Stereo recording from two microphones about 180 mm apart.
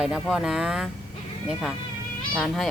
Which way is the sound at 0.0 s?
5° right (ahead or behind).